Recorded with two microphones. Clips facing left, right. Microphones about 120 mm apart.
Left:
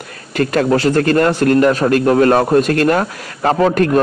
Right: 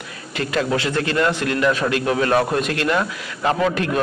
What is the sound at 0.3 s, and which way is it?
A man's voice, 50° left (ahead or behind).